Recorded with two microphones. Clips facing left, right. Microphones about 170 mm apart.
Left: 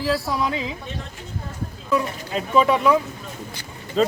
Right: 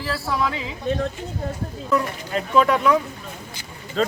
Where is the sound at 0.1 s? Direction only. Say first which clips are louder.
Even; 20° left (ahead or behind).